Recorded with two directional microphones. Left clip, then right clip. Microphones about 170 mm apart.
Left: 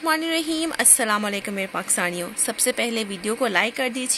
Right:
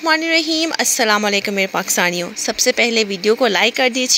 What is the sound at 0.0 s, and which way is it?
A woman's voice, 20° right (ahead or behind).